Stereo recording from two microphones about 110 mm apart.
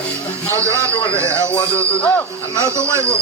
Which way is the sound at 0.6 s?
25° right (ahead or behind).